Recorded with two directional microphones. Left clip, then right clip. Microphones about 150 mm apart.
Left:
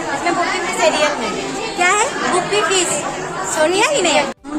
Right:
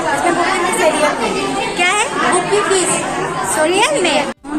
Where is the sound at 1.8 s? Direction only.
35° left (ahead or behind).